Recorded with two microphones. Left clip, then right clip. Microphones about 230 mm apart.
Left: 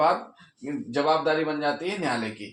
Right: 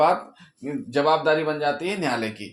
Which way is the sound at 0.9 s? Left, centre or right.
Right.